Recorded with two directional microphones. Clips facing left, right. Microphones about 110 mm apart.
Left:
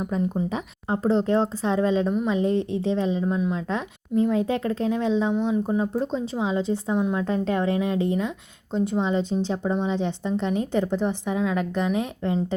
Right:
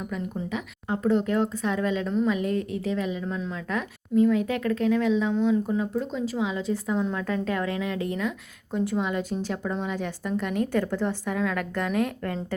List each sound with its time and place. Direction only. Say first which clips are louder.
0.1 s a woman's voice: left 5 dB; 30° left (ahead or behind)